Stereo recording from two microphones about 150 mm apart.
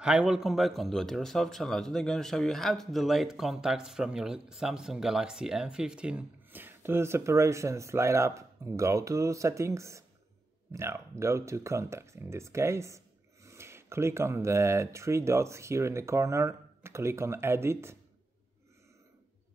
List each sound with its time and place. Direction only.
0.0 s a man's voice: 5° right (ahead or behind)